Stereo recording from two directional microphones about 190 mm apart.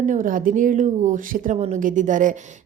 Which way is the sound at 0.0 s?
45° right (ahead or behind).